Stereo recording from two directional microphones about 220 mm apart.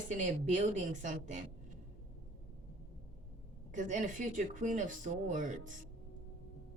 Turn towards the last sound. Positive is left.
turn(degrees=-35)  # may be behind; listen again after turning